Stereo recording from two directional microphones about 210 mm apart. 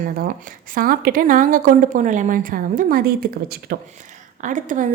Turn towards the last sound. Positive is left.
turn(degrees=-40)  # may be behind; listen again after turning